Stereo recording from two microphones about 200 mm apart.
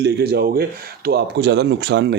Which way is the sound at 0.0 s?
55° right (ahead or behind).